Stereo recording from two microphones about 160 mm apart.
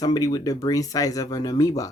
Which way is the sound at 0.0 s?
25° left (ahead or behind).